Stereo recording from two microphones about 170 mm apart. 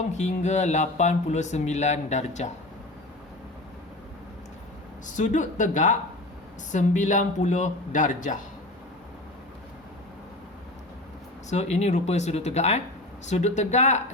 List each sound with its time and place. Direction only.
0.1 s speech: 45° left (ahead or behind)
5.0 s speech: 45° left (ahead or behind)
11.4 s speech: 40° left (ahead or behind)